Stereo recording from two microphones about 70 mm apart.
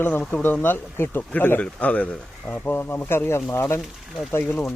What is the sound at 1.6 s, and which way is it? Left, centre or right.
Speech, centre.